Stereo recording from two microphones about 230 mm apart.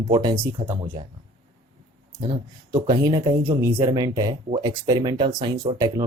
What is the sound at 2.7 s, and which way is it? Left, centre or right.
Speech, centre.